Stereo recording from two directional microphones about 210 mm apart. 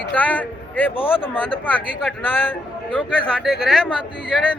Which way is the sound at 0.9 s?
25° left (ahead or behind).